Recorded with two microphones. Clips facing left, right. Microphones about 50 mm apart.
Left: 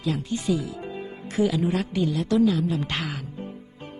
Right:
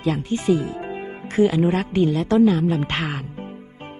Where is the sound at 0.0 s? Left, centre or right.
Right.